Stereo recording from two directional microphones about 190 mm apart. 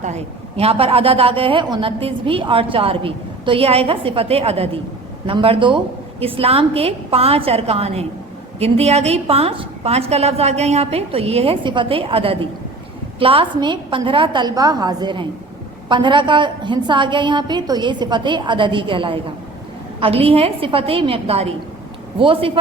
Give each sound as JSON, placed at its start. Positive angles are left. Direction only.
{"t": 0.0, "sound": "a woman's voice", "side_deg": -35}